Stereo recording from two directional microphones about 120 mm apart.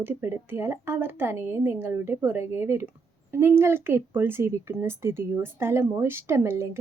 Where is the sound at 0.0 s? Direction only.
20° right (ahead or behind).